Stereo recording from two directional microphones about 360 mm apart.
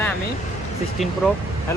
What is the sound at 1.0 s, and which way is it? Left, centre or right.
Speech, centre.